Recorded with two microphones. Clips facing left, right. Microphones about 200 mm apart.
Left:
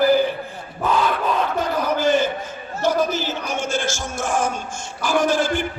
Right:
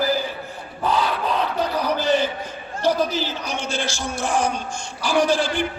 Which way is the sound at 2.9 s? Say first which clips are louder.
Even; 50° left (ahead or behind).